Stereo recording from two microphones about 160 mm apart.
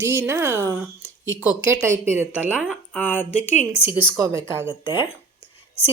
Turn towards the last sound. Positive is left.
turn(degrees=35)  # may be behind; listen again after turning